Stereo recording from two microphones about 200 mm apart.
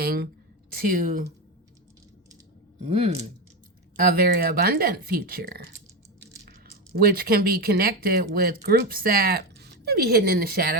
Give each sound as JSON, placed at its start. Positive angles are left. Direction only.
{"t": 0.0, "sound": "a woman's voice", "side_deg": -50}
{"t": 2.8, "sound": "speech", "side_deg": -30}
{"t": 3.9, "sound": "speech", "side_deg": -45}
{"t": 6.9, "sound": "speech", "side_deg": -50}